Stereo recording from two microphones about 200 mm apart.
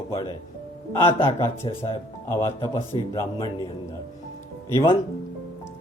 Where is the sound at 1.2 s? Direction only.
25° left (ahead or behind).